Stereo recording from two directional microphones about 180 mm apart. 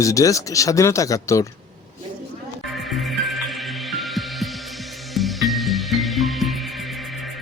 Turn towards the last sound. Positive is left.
turn(degrees=0)  # may be behind; listen again after turning